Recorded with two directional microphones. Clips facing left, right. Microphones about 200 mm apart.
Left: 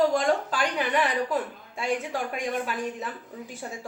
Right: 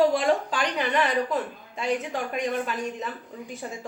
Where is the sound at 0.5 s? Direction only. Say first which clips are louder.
Even; 5° left (ahead or behind).